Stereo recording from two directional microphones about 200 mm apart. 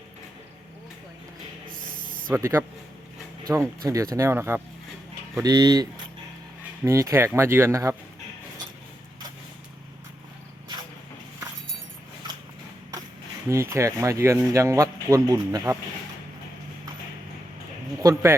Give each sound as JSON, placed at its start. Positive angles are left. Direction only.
{"t": 2.3, "sound": "speech", "side_deg": -15}
{"t": 13.5, "sound": "speech", "side_deg": -15}
{"t": 18.0, "sound": "speech", "side_deg": -15}